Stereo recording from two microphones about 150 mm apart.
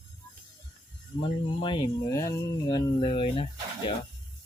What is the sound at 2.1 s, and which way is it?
Speech, 20° left (ahead or behind).